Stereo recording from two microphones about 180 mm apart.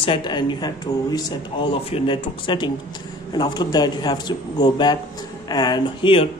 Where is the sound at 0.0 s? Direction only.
25° left (ahead or behind).